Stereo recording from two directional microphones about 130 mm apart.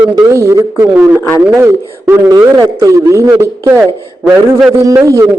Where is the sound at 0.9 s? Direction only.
10° right (ahead or behind).